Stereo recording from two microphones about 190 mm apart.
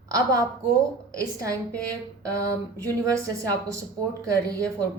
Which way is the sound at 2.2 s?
15° right (ahead or behind).